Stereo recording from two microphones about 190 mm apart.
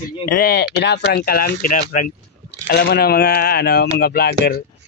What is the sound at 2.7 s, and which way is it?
Speech, 55° left (ahead or behind).